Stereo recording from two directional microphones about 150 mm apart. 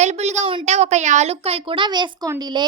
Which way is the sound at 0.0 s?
50° right (ahead or behind).